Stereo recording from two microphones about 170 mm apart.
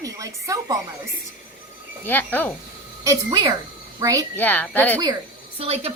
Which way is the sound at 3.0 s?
20° right (ahead or behind).